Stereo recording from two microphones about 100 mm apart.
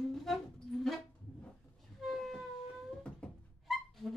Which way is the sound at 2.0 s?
Centre (ahead or behind).